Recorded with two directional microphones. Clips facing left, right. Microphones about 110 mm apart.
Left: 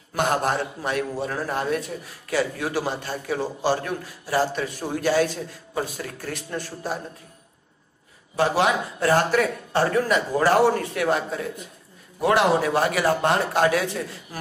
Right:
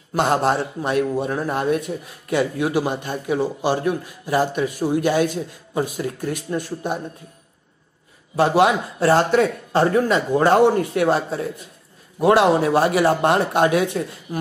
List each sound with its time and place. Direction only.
0.1 s a man's voice: 20° right (ahead or behind)
8.4 s a man's voice: 25° right (ahead or behind)